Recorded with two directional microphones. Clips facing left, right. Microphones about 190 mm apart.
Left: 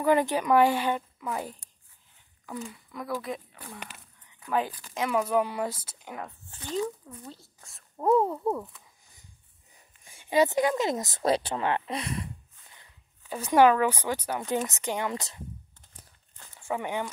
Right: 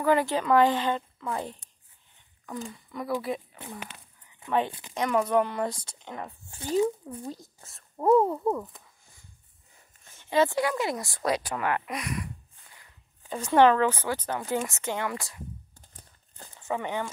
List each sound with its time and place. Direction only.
0.0 s speech: 15° left (ahead or behind)
2.7 s a woman's voice: centre (ahead or behind)
4.6 s speech: 25° right (ahead or behind)
4.9 s a woman's voice: 5° left (ahead or behind)
6.5 s speech: 10° right (ahead or behind)
7.0 s speech: 25° right (ahead or behind)
7.6 s a woman's voice: centre (ahead or behind)
10.0 s speech: 15° left (ahead or behind)
13.3 s speech: 10° left (ahead or behind)
16.5 s speech: 10° left (ahead or behind)